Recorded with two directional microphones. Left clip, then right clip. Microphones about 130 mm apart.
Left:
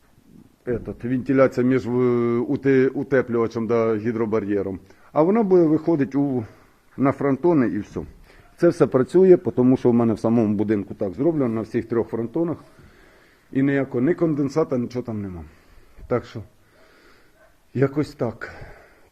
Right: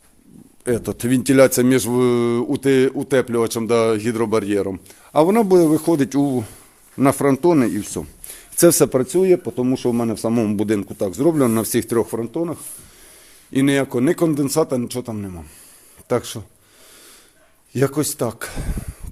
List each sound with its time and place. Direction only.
1.2 s speech: 75° right (ahead or behind)
1.5 s a man's voice: 45° right (ahead or behind)
7.0 s speech: 55° right (ahead or behind)
7.4 s a man's voice: 40° right (ahead or behind)
9.0 s a man's voice: centre (ahead or behind)
9.4 s speech: 15° left (ahead or behind)
9.6 s a man's voice: centre (ahead or behind)
10.3 s a man's voice: 30° right (ahead or behind)
11.2 s speech: 75° right (ahead or behind)
12.0 s a man's voice: 30° right (ahead or behind)
12.3 s speech: 5° right (ahead or behind)
13.5 s speech: 50° right (ahead or behind)
14.4 s a man's voice: 30° right (ahead or behind)
17.7 s a man's voice: 25° right (ahead or behind); by 18.8 s 45° right (ahead or behind)